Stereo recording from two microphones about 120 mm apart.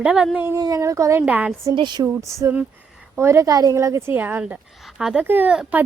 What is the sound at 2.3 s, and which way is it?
Speech, 25° right (ahead or behind).